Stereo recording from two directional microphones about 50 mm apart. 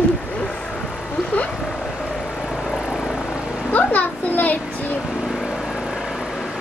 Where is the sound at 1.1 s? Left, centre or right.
Left.